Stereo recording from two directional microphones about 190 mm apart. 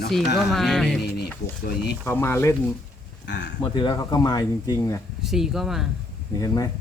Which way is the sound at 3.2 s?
70° left (ahead or behind).